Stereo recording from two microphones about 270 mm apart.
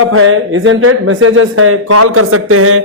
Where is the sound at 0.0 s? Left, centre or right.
Right.